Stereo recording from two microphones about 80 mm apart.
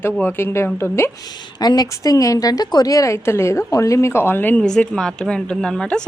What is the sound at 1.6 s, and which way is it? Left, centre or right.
A woman's voice, left.